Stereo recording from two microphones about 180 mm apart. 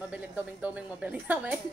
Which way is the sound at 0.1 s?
5° right (ahead or behind).